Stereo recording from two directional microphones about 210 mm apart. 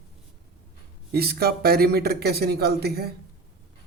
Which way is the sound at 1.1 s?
50° right (ahead or behind).